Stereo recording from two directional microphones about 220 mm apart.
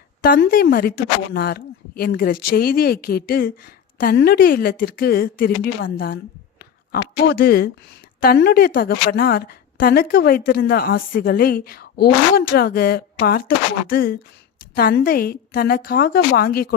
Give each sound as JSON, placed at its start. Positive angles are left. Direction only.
{"t": 0.2, "sound": "a woman's voice", "side_deg": 40}